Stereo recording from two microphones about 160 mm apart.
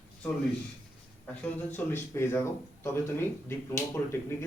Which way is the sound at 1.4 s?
10° left (ahead or behind).